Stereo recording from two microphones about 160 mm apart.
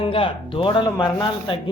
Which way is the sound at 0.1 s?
35° left (ahead or behind).